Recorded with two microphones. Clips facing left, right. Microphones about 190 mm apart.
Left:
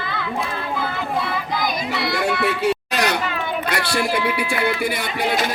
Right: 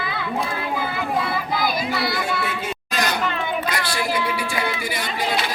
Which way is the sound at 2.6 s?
65° left (ahead or behind).